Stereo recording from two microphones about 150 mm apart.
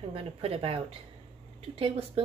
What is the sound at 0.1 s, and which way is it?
Speech, 40° right (ahead or behind).